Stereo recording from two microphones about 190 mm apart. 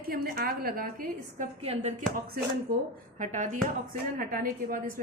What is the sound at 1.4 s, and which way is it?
Speech, 35° right (ahead or behind).